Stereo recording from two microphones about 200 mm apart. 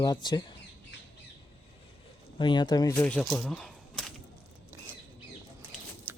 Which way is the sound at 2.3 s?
25° left (ahead or behind).